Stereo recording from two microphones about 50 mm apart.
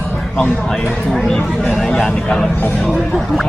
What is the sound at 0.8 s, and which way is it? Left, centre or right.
Speech, left.